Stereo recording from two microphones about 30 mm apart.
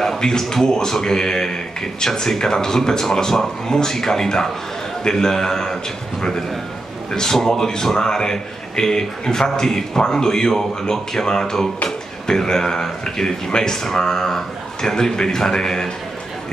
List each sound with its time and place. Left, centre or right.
0.2 s a man's voice: left
7.1 s a man's voice: centre